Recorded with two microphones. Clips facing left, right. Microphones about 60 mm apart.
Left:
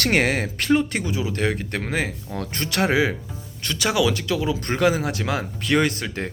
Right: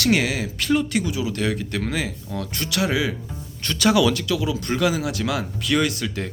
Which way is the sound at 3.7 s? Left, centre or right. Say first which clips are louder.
Right 3 dB; centre.